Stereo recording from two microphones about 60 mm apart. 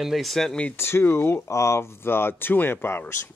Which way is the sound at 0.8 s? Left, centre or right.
Left.